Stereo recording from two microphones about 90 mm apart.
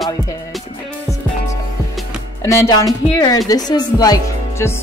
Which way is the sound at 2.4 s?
35° left (ahead or behind).